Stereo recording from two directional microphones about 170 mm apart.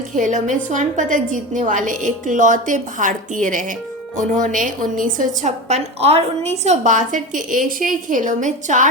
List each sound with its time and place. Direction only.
0.2 s a woman's voice: 45° right (ahead or behind)